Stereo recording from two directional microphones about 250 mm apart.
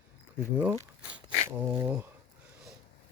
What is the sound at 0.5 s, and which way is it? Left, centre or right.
Speech, centre.